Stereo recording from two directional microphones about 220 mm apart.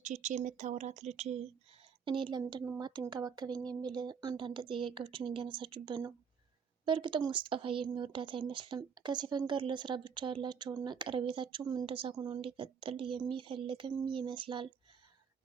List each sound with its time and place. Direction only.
0.0 s a woman's voice: 35° right (ahead or behind)